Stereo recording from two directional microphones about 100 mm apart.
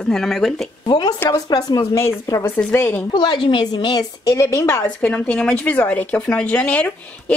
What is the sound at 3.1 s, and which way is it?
Speech, 50° left (ahead or behind).